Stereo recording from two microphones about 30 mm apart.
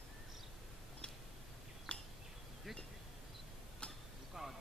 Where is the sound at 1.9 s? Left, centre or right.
Left.